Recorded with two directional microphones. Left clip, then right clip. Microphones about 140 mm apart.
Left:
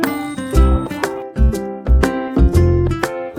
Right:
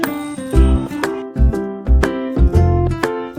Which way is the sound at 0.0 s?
Centre (ahead or behind).